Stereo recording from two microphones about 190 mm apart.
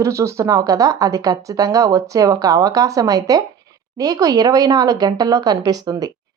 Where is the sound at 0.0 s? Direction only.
15° right (ahead or behind).